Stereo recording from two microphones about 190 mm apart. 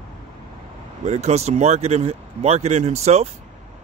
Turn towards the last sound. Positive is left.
turn(degrees=-35)  # may be behind; listen again after turning